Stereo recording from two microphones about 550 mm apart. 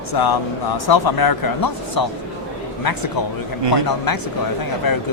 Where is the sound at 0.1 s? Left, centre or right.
Left.